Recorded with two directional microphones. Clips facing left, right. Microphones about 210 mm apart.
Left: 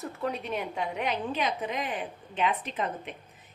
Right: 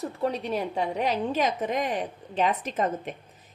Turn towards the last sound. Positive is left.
turn(degrees=-45)  # may be behind; listen again after turning